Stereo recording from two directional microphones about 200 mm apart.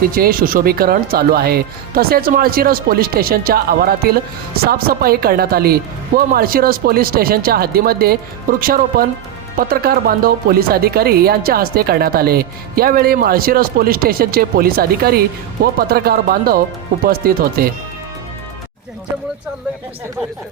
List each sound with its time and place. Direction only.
0.1 s speech: 45° right (ahead or behind)